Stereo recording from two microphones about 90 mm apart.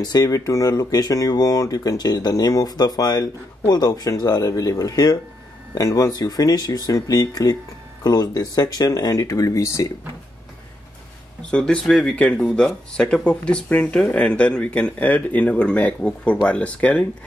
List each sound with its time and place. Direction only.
0.0 s speech: 45° left (ahead or behind)
11.5 s speech: 10° left (ahead or behind)